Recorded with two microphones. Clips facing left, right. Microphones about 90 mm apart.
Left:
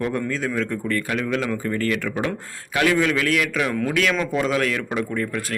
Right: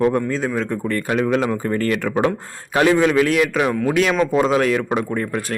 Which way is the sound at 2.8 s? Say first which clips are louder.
Right 5 dB; 25° right (ahead or behind).